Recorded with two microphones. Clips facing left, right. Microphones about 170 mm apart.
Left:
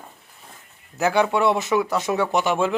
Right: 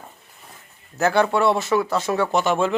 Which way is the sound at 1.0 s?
10° left (ahead or behind).